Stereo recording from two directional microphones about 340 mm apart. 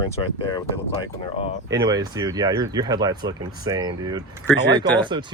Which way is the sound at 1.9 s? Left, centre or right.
Centre.